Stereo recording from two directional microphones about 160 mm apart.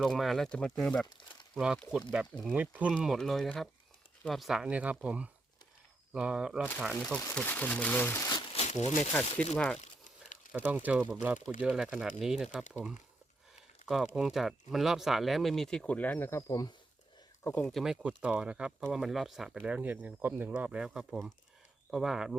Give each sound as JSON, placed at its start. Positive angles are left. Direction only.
{"t": 0.0, "sound": "speech", "side_deg": 0}
{"t": 7.3, "sound": "speech", "side_deg": 10}
{"t": 9.4, "sound": "speech", "side_deg": 5}
{"t": 9.8, "sound": "crumpling", "side_deg": 50}
{"t": 10.5, "sound": "speech", "side_deg": -10}
{"t": 13.8, "sound": "speech", "side_deg": -5}
{"t": 17.4, "sound": "speech", "side_deg": 10}